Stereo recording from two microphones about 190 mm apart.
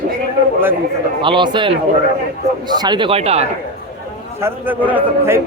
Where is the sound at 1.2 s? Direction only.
25° right (ahead or behind).